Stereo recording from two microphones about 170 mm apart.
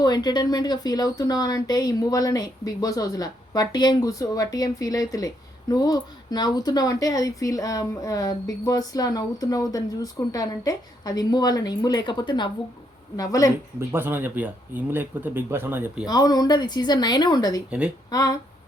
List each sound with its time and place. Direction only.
0.0 s speech: 25° left (ahead or behind)
13.7 s speech: 15° right (ahead or behind)
16.0 s speech: 20° left (ahead or behind)
17.7 s speech: 5° right (ahead or behind)
18.1 s speech: 20° left (ahead or behind)